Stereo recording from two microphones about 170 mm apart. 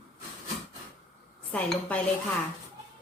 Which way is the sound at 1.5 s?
10° left (ahead or behind).